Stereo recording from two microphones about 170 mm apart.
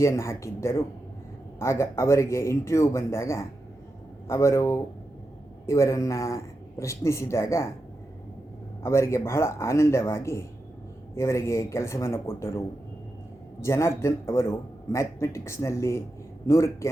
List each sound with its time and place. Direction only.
0.0 s speech: 15° left (ahead or behind)
8.8 s speech: 15° left (ahead or behind)